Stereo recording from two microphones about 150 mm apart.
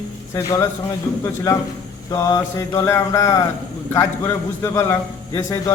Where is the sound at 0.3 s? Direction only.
20° left (ahead or behind).